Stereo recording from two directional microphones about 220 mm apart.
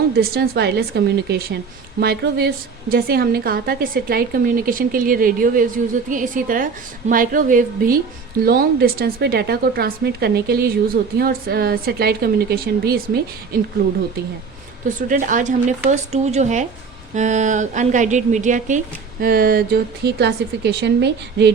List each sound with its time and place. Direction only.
0.2 s a woman's voice: 45° right (ahead or behind)
14.8 s a woman's voice: 35° right (ahead or behind)